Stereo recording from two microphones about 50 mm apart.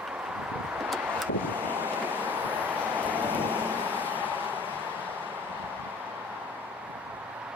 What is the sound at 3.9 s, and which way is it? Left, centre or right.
Vehicle, right.